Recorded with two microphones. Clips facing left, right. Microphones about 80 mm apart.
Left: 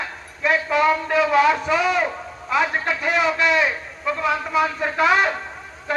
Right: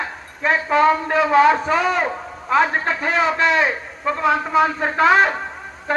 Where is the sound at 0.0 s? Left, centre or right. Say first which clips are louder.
Right 2 dB; right.